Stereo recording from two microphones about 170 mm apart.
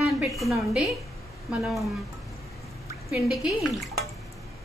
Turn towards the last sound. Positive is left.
turn(degrees=0)  # may be behind; listen again after turning